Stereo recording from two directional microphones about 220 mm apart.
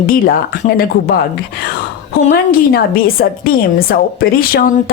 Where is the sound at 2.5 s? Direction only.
40° left (ahead or behind).